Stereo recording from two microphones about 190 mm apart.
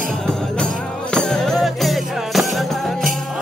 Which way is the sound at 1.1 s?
5° left (ahead or behind).